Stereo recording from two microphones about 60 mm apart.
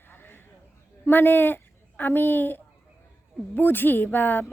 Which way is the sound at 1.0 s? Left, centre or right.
Left.